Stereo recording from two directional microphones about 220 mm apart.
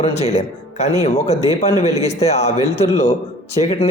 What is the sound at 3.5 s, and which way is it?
Speech, 30° left (ahead or behind).